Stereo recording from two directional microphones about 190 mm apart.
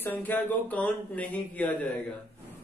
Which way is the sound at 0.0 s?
10° left (ahead or behind).